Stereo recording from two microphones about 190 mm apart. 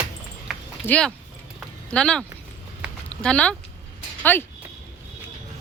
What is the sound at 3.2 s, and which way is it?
Speech, 5° left (ahead or behind).